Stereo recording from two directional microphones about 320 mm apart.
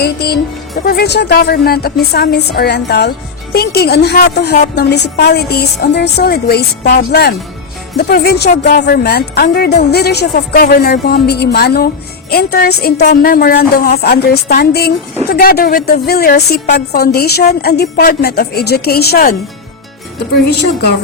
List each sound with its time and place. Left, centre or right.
0.0 s a woman's voice: left